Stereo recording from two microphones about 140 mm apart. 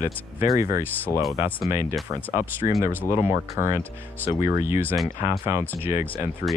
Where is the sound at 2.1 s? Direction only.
25° right (ahead or behind).